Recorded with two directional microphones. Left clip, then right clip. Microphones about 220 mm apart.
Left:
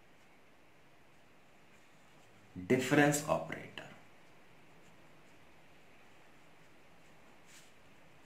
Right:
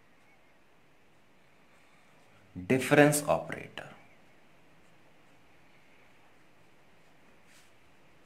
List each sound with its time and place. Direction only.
2.6 s speech: 50° right (ahead or behind)